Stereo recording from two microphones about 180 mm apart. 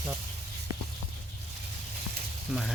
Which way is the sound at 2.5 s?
Centre (ahead or behind).